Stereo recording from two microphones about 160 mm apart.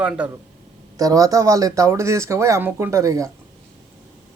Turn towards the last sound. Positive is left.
turn(degrees=-20)  # may be behind; listen again after turning